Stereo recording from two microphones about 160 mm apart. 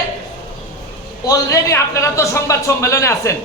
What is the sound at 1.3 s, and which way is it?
A man's voice, 20° left (ahead or behind).